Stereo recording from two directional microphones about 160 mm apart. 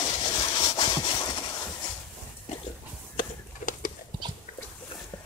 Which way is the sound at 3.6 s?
50° left (ahead or behind).